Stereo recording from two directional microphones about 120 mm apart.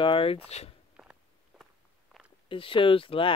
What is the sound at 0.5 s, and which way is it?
Speech, 60° left (ahead or behind).